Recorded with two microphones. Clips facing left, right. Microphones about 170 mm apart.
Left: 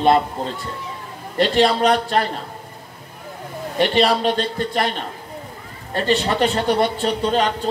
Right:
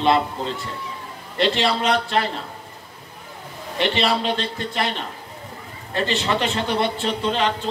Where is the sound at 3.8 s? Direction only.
45° left (ahead or behind).